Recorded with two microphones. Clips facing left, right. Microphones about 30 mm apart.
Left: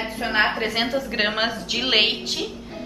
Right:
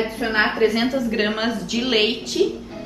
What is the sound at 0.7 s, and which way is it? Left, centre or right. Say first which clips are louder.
A woman's voice: right 2 dB; centre.